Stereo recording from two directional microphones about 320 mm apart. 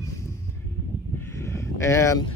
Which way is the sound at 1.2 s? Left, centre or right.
Centre.